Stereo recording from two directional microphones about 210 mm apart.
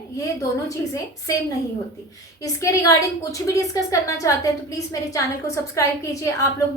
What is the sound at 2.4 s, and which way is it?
A woman's voice, 15° left (ahead or behind).